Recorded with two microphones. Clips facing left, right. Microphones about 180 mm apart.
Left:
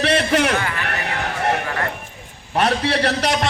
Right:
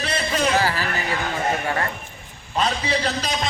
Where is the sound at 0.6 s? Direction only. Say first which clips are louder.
Right 3 dB; 35° right (ahead or behind).